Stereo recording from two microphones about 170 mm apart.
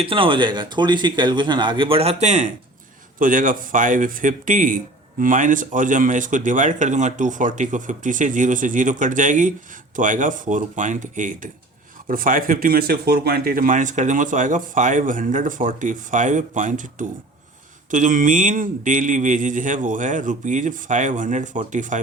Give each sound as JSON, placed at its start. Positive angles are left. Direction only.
{"t": 0.0, "sound": "speech", "side_deg": -30}
{"t": 3.2, "sound": "speech", "side_deg": -50}